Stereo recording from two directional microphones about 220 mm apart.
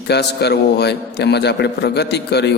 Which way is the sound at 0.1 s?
50° left (ahead or behind).